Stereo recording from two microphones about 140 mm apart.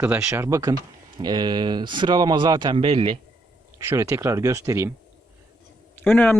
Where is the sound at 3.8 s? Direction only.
20° right (ahead or behind).